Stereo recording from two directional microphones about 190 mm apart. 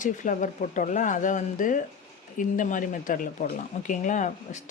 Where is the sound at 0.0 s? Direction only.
40° left (ahead or behind).